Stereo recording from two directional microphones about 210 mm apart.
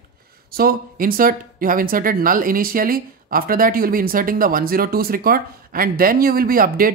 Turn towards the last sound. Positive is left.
turn(degrees=-45)  # may be behind; listen again after turning